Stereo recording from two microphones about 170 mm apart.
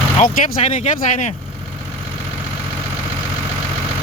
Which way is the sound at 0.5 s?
40° left (ahead or behind).